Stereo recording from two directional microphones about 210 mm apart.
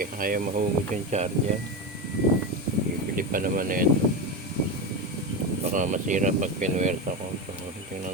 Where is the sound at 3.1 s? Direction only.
40° right (ahead or behind).